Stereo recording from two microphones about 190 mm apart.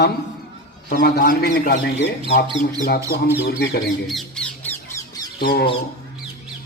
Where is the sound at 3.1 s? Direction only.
55° left (ahead or behind).